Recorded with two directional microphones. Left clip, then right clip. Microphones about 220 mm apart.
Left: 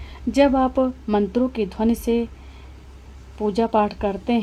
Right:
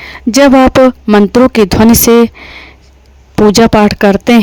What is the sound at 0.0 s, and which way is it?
Speech, 50° right (ahead or behind).